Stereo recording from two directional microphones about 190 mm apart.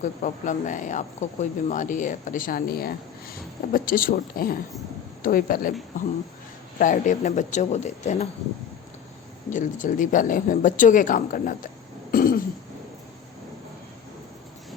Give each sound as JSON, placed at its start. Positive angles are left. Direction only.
{"t": 0.0, "sound": "speech", "side_deg": 40}
{"t": 6.7, "sound": "a man's voice", "side_deg": 45}
{"t": 9.5, "sound": "speech", "side_deg": 40}
{"t": 12.1, "sound": "throat clearing", "side_deg": 50}